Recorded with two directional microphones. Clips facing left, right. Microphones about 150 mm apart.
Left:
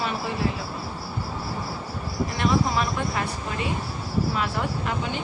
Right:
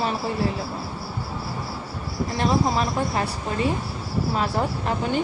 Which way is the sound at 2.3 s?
35° right (ahead or behind).